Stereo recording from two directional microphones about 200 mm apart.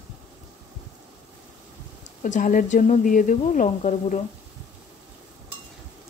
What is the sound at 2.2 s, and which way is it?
Speech, 40° left (ahead or behind).